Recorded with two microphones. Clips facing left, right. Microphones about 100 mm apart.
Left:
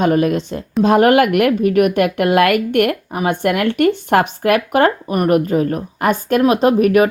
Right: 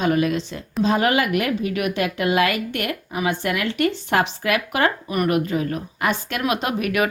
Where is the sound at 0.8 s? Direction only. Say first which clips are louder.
Left 8 dB; 55° left (ahead or behind).